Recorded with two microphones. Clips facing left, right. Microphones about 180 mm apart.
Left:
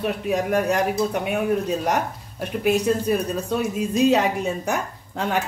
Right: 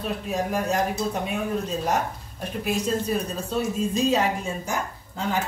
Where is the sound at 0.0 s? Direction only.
65° left (ahead or behind).